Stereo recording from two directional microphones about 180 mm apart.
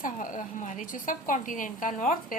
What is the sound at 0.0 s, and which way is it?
A woman's voice, 50° left (ahead or behind).